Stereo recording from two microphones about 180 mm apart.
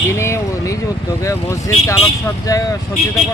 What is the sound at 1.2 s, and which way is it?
Speech, 15° left (ahead or behind).